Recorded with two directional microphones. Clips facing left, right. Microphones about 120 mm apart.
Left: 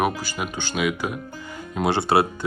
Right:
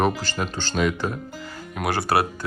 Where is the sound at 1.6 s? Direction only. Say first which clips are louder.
Left 3 dB; 25° left (ahead or behind).